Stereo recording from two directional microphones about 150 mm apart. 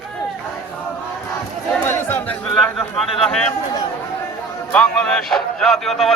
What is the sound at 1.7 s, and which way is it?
Chatter, 15° left (ahead or behind).